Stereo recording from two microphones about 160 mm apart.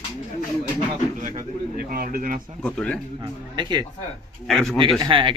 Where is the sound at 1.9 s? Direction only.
65° right (ahead or behind).